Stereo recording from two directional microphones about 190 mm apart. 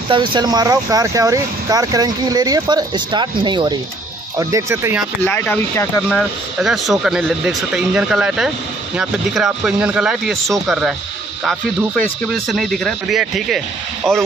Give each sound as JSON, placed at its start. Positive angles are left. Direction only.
{"t": 0.1, "sound": "speech", "side_deg": -25}
{"t": 5.2, "sound": "speech", "side_deg": 10}
{"t": 6.0, "sound": "speech", "side_deg": 0}